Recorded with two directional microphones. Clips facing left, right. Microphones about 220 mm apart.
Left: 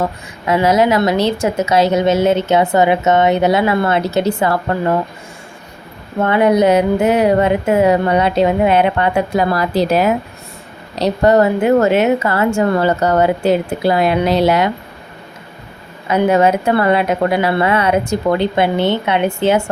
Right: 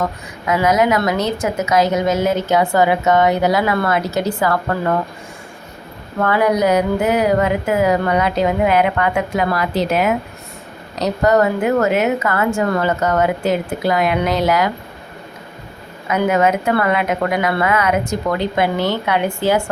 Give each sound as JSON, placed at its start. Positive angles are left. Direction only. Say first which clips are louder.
{"t": 0.4, "sound": "a woman's voice", "louder": "left 2 dB", "side_deg": 30}
{"t": 6.1, "sound": "a woman's voice", "louder": "left 4 dB", "side_deg": 25}
{"t": 16.0, "sound": "a woman's voice", "louder": "left 3 dB", "side_deg": 30}